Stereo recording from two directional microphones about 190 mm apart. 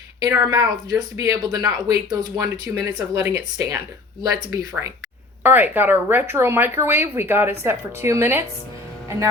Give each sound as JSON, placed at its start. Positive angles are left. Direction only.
{"t": 0.2, "sound": "speech", "side_deg": -15}